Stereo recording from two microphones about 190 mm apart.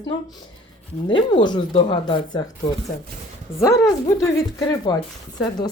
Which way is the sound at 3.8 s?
15° left (ahead or behind).